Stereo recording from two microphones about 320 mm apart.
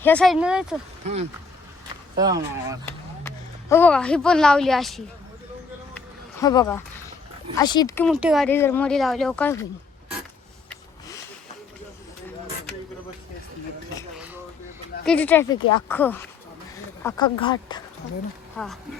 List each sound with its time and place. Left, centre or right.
0.0 s speech: centre
1.0 s speech: centre
3.2 s speech: centre
6.4 s speech: centre
15.0 s speech: centre
18.5 s speech: centre